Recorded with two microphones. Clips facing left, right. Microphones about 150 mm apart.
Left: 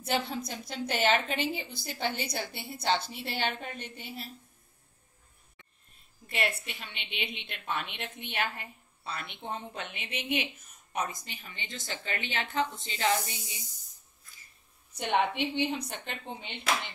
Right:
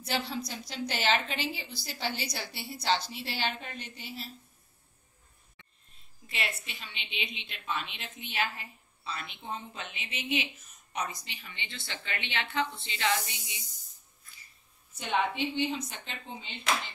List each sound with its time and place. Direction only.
0.0 s a woman's voice: 50° left (ahead or behind)
6.2 s a woman's voice: 55° left (ahead or behind); by 13.6 s 40° left (ahead or behind)
15.0 s a woman's voice: 65° left (ahead or behind)